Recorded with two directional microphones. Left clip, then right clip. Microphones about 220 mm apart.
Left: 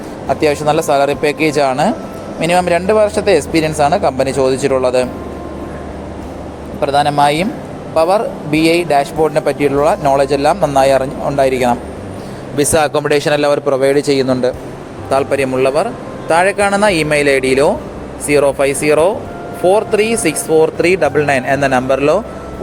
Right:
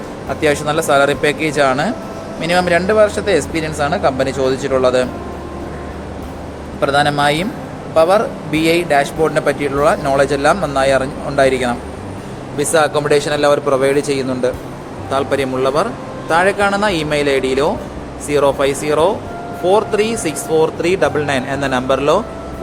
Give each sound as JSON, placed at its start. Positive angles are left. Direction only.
{"t": 0.3, "sound": "speech", "side_deg": 20}
{"t": 6.7, "sound": "speech", "side_deg": 20}
{"t": 12.5, "sound": "speech", "side_deg": 30}
{"t": 15.1, "sound": "speech", "side_deg": 15}